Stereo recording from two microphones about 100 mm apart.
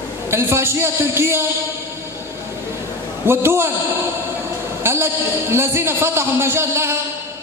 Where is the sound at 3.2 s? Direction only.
25° right (ahead or behind).